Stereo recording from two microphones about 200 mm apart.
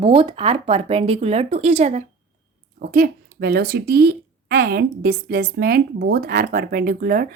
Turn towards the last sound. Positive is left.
turn(degrees=-45)  # may be behind; listen again after turning